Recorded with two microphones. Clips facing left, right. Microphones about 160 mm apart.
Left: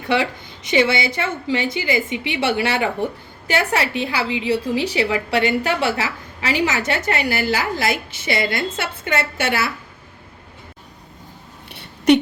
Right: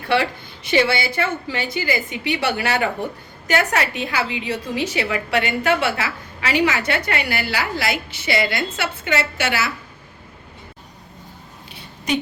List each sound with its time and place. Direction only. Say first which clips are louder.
0.7 s a woman's voice: left 1 dB; 20° left (ahead or behind); by 7.9 s 40° left (ahead or behind)
8.2 s a woman's voice: right 2 dB; 25° left (ahead or behind)
8.8 s a woman's voice: even; 50° left (ahead or behind)
11.8 s a sound: left 9 dB; 70° left (ahead or behind)